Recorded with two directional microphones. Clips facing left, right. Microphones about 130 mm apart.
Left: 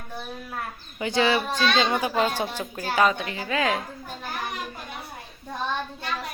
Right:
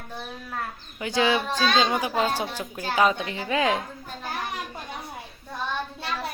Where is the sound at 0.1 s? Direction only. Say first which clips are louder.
Left 1 dB; 10° left (ahead or behind).